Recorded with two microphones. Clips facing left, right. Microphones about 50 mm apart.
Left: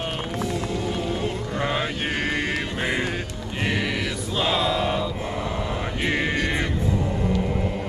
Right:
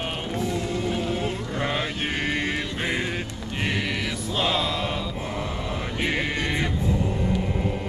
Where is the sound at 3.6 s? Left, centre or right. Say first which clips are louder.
Left 2 dB; centre.